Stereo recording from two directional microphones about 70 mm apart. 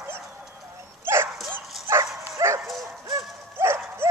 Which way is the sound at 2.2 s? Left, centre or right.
Right.